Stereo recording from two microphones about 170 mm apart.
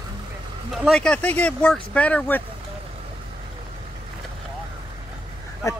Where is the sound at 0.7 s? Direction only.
5° left (ahead or behind).